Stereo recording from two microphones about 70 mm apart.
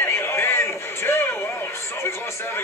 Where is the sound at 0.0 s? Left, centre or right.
Left.